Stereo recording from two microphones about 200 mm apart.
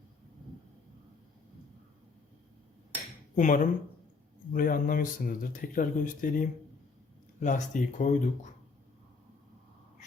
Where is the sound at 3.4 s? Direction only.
40° left (ahead or behind).